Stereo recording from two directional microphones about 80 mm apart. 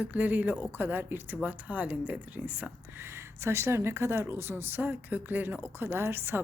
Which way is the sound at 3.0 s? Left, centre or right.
Right.